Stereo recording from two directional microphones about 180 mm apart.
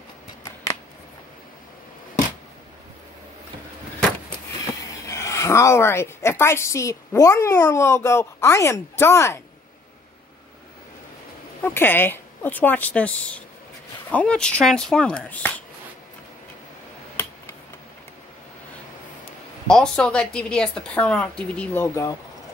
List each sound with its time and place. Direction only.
5.0 s a woman's voice: 15° left (ahead or behind)
11.6 s speech: 10° left (ahead or behind)
19.7 s speech: 5° left (ahead or behind)